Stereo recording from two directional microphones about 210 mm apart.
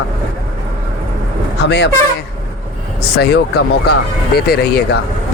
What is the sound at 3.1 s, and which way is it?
Speech, 50° left (ahead or behind).